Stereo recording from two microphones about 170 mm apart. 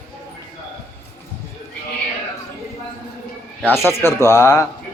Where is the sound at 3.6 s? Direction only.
15° left (ahead or behind).